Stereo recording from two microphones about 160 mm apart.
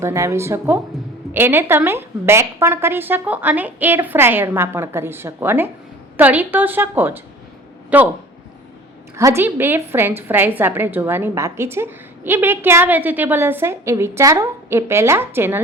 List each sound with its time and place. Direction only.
0.0 s a woman's voice: 20° right (ahead or behind)
9.1 s a woman's voice: 15° right (ahead or behind)